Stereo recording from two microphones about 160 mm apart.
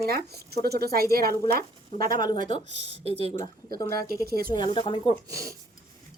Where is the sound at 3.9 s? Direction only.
70° right (ahead or behind).